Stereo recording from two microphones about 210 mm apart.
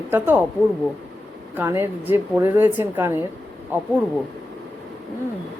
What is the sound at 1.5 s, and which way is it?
Speech, 10° right (ahead or behind).